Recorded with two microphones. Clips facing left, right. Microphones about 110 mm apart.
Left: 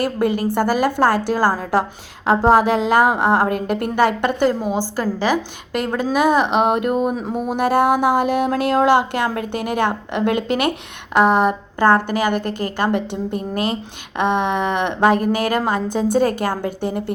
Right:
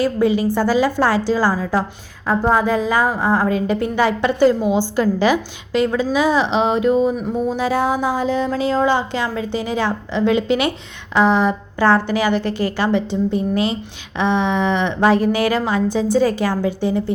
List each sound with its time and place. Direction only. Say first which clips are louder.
0.0 s speech: right 2 dB; 55° left (ahead or behind)
2.5 s speech: left 3 dB; 75° left (ahead or behind); by 4.5 s 50° left (ahead or behind)
4.7 s a woman's voice: right 4 dB; 40° left (ahead or behind)
6.0 s a woman's voice: even; 55° left (ahead or behind)